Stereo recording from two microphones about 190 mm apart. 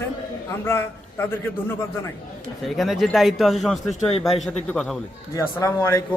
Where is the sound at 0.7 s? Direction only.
15° left (ahead or behind).